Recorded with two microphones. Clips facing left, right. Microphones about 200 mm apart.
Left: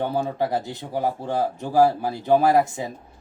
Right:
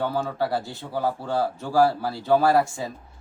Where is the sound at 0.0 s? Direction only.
20° left (ahead or behind).